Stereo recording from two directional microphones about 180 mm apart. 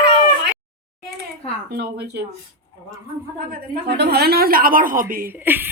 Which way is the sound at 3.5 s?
65° right (ahead or behind).